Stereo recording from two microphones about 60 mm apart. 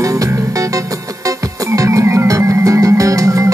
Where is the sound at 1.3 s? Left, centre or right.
Right.